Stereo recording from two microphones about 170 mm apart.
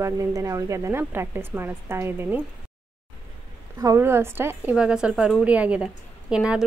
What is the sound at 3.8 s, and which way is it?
A woman's voice, 15° right (ahead or behind).